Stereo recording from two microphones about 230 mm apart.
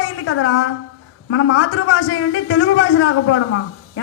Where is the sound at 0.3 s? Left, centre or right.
Left.